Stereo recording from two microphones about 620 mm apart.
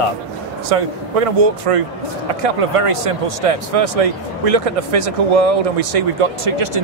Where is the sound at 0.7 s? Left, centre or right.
Right.